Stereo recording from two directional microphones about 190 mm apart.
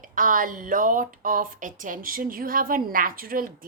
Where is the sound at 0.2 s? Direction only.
45° right (ahead or behind).